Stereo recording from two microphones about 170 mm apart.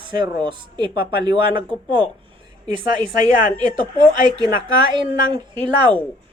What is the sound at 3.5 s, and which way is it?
A man's voice, 25° right (ahead or behind).